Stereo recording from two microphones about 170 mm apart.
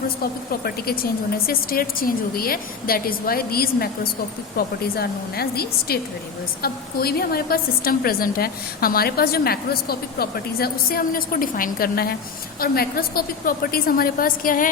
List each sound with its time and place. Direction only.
0.2 s a woman's voice: 65° left (ahead or behind)